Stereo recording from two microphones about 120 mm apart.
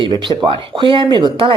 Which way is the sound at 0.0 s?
45° right (ahead or behind).